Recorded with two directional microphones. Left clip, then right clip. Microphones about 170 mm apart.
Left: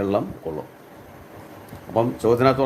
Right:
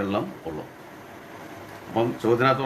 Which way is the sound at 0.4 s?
60° left (ahead or behind).